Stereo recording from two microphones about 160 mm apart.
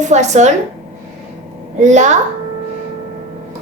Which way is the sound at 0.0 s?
45° right (ahead or behind).